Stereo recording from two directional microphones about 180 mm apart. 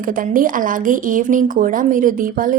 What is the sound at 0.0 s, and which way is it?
Speech, 50° right (ahead or behind).